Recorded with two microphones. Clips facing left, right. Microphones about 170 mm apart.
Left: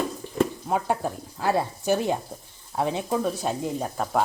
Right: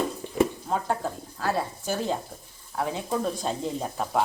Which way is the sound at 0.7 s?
15° left (ahead or behind).